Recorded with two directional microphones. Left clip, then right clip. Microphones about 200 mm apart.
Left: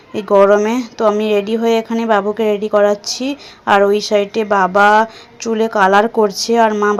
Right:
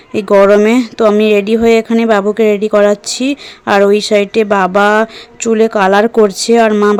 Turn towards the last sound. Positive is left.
turn(degrees=-30)  # may be behind; listen again after turning